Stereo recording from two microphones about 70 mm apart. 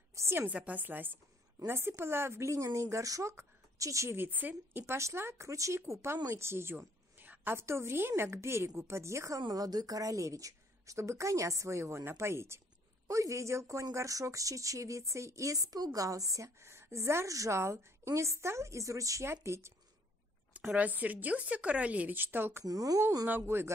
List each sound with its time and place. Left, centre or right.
0.1 s a sound: right
0.4 s speech: right
4.2 s speech: right
4.9 s a woman's voice: right
9.4 s a woman's voice: right
20.7 s speech: right
22.7 s speech: right
23.2 s a woman's voice: right